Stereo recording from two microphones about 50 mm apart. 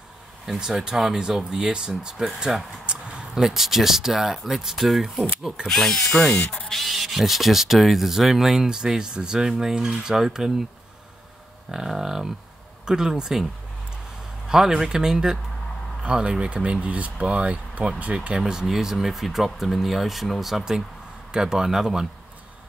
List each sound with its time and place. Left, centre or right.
0.5 s speech: centre
3.3 s speech: centre
5.7 s speech: centre
11.7 s speech: centre
14.5 s speech: centre
18.4 s speech: centre